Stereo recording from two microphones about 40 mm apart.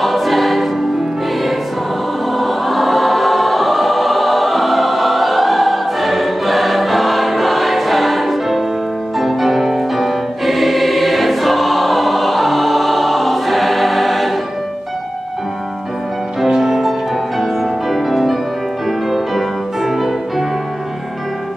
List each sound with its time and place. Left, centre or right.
0.0 s choir: centre
2.3 s choir: centre
16.4 s music: centre